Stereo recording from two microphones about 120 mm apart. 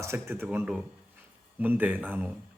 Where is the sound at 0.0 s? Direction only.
20° right (ahead or behind).